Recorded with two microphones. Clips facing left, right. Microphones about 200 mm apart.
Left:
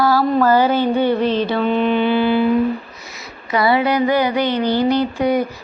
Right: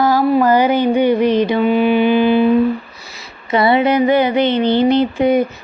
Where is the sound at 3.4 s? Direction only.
25° right (ahead or behind).